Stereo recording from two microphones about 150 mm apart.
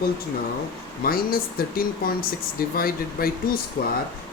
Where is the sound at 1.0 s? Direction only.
75° left (ahead or behind).